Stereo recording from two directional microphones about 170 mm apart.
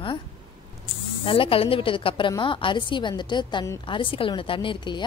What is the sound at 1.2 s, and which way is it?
A woman's voice, 30° left (ahead or behind).